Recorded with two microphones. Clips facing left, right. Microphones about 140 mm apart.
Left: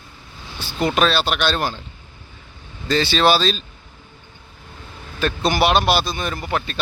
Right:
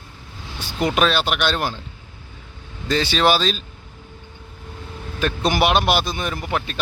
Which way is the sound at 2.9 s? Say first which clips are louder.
Left 1 dB; 10° right (ahead or behind).